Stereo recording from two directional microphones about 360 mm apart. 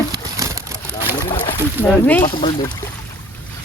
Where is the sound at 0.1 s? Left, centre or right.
Centre.